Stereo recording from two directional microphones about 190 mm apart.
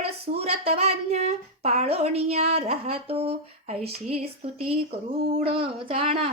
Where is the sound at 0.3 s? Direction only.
30° right (ahead or behind).